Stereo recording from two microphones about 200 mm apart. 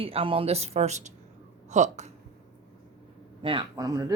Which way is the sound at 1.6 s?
35° right (ahead or behind).